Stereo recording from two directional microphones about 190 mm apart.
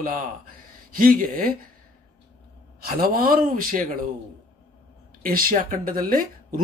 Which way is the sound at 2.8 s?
50° right (ahead or behind).